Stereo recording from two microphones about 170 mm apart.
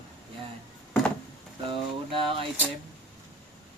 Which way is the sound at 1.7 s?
30° right (ahead or behind).